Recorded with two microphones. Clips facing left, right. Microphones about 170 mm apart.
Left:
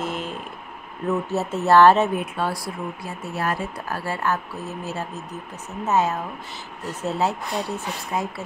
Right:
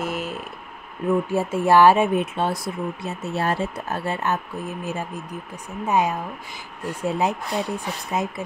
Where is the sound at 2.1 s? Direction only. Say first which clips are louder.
Right 3 dB; 25° right (ahead or behind).